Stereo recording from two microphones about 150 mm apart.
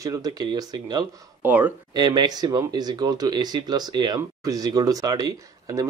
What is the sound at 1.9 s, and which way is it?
Speech, 25° right (ahead or behind).